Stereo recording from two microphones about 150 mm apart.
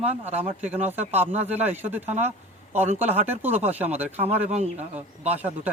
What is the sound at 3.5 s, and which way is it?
Speech, 45° right (ahead or behind).